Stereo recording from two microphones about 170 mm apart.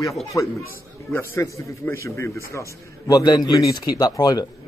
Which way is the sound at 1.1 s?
15° left (ahead or behind).